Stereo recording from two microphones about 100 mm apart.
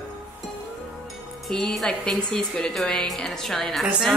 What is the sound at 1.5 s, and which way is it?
Speech, 5° left (ahead or behind).